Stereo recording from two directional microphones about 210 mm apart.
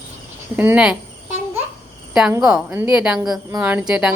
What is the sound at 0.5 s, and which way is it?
Speech, 5° right (ahead or behind).